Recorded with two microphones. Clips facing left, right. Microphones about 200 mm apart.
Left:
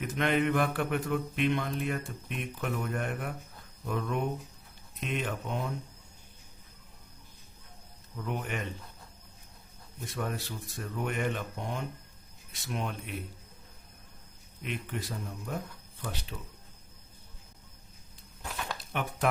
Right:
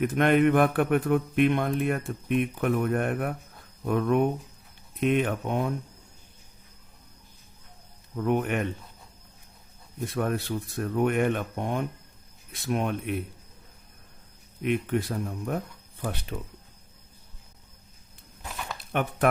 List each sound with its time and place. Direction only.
0.0 s speech: 55° right (ahead or behind)
8.1 s speech: 55° right (ahead or behind)
10.1 s speech: 55° right (ahead or behind)
14.6 s speech: 55° right (ahead or behind)
18.4 s a sound: centre (ahead or behind)